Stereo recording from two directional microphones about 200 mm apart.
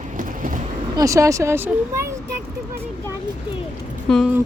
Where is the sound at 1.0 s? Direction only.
15° right (ahead or behind).